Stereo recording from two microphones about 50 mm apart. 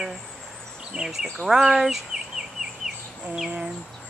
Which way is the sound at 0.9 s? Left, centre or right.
Right.